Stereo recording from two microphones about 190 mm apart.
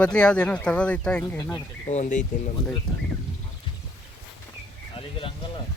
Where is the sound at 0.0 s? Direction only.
5° left (ahead or behind).